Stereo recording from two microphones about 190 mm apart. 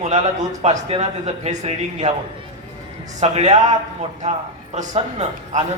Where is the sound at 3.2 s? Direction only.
35° right (ahead or behind).